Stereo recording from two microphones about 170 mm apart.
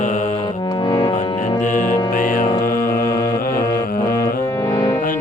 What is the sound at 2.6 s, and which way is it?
Mantra, 55° left (ahead or behind).